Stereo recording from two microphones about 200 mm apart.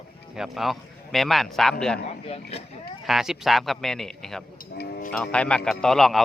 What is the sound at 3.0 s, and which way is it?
Speech, centre (ahead or behind).